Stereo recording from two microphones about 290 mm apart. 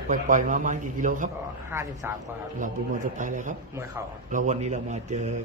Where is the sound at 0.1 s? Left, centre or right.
Right.